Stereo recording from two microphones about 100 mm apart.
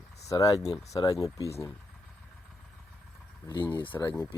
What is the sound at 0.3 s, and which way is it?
Speech, 35° left (ahead or behind).